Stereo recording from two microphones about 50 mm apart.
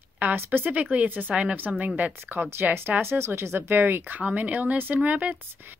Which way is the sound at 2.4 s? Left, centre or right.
Right.